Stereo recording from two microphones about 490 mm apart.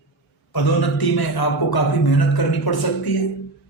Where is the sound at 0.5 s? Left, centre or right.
Left.